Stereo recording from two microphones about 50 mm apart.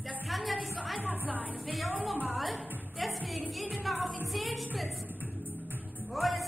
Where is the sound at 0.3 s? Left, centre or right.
Centre.